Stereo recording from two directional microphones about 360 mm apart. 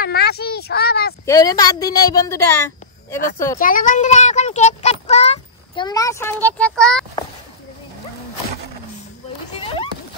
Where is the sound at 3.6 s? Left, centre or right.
Left; by 7.0 s centre.